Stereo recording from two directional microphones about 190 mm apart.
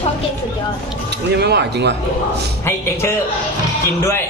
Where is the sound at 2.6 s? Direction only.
15° left (ahead or behind).